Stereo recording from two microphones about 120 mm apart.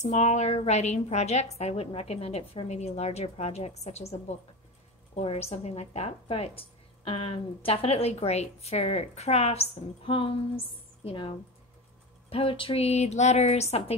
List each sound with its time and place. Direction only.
0.0 s a woman's voice: 70° left (ahead or behind)